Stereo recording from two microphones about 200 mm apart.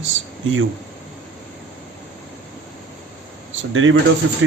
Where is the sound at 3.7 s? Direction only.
75° right (ahead or behind).